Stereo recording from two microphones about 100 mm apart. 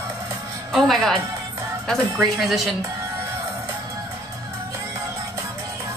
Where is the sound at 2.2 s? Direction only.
Centre (ahead or behind).